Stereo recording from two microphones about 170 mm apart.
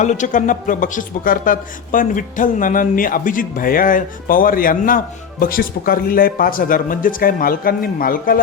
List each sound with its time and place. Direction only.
0.0 s speech: 45° left (ahead or behind)